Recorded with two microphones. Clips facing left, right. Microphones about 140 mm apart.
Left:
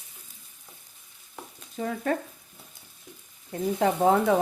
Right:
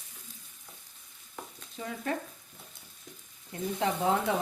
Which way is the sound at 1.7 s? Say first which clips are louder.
Left 7 dB; 45° left (ahead or behind).